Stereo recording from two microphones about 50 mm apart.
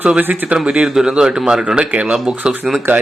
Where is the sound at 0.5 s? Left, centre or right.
Right.